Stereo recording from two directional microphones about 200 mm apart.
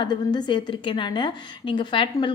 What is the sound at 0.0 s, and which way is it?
A woman's voice, 20° left (ahead or behind).